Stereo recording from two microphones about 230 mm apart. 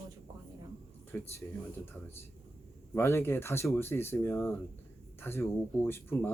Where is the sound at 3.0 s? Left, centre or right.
Centre.